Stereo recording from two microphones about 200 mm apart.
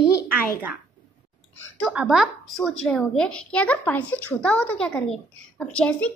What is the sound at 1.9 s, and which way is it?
A woman's voice, centre (ahead or behind).